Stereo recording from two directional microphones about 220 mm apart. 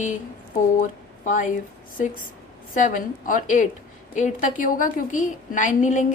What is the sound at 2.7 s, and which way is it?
A woman's voice, 35° left (ahead or behind).